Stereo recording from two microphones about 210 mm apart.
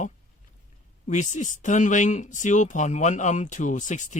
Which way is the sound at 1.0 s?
35° left (ahead or behind).